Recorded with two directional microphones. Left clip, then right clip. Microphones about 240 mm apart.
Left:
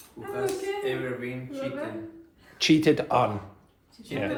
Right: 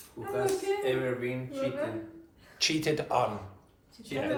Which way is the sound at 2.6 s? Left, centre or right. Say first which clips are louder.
Left 7 dB; left.